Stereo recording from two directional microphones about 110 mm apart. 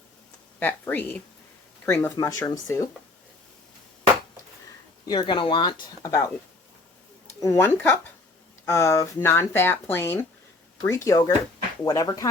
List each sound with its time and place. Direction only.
0.6 s speech: 15° left (ahead or behind)
2.0 s speech: 30° left (ahead or behind)
5.0 s speech: 45° left (ahead or behind)
6.0 s speech: 30° left (ahead or behind)
7.4 s speech: 25° left (ahead or behind)